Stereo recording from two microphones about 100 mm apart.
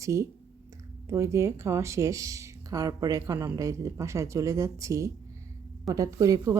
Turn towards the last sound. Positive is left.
turn(degrees=-35)  # may be behind; listen again after turning